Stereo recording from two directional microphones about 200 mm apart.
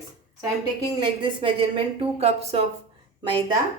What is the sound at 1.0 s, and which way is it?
A woman's voice, 25° right (ahead or behind).